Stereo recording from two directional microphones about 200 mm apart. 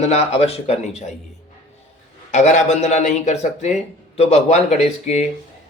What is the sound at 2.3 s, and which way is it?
Speech, 35° left (ahead or behind).